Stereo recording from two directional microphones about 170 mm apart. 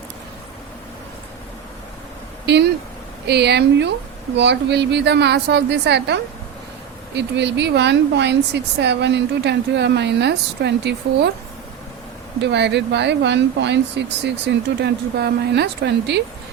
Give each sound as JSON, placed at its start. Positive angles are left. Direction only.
{"t": 3.2, "sound": "a woman's voice", "side_deg": -80}
{"t": 12.4, "sound": "speech", "side_deg": -90}
{"t": 14.8, "sound": "a woman's voice", "side_deg": -80}